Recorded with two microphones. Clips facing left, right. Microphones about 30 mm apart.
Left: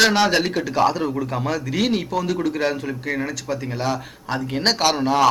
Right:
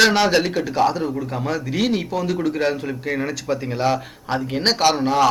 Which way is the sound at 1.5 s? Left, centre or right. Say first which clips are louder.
Right 1 dB; centre.